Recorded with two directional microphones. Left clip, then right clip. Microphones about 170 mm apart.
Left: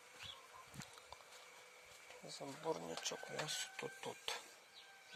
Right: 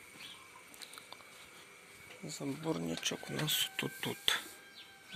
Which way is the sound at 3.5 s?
Centre (ahead or behind).